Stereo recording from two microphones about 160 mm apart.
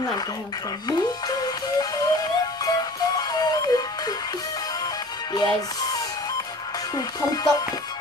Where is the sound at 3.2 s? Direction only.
25° left (ahead or behind).